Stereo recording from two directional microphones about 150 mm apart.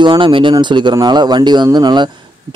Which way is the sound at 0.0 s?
30° right (ahead or behind).